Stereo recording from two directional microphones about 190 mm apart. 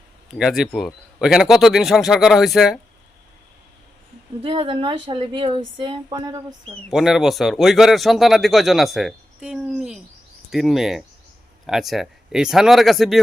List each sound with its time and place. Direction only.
0.3 s speech: 5° right (ahead or behind)
4.4 s a woman's voice: 30° right (ahead or behind)
6.9 s speech: centre (ahead or behind)